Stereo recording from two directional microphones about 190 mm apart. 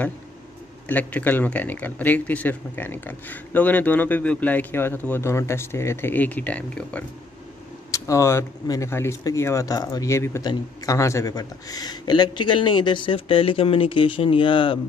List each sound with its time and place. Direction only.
0.8 s speech: 10° left (ahead or behind); by 14.8 s 25° left (ahead or behind)